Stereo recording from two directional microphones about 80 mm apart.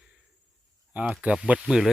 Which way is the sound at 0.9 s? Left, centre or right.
Centre.